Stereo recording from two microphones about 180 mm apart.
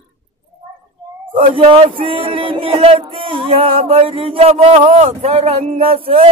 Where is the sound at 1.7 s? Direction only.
30° right (ahead or behind).